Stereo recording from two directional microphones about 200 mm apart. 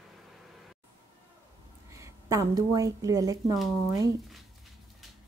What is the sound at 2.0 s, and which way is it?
Speech, 15° right (ahead or behind).